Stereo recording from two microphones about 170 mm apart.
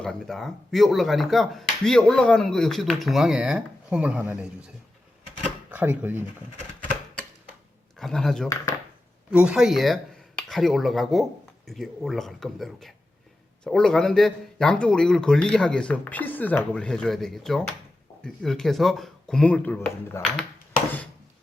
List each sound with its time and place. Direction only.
0.0 s speech: 5° left (ahead or behind)
5.7 s speech: 10° right (ahead or behind)
7.9 s speech: centre (ahead or behind)